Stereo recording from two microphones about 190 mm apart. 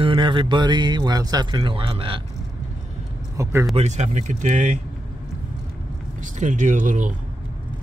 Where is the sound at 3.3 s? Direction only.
15° right (ahead or behind).